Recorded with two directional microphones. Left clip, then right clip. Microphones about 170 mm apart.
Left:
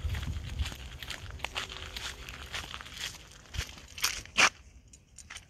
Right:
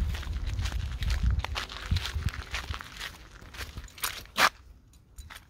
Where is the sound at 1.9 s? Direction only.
5° right (ahead or behind).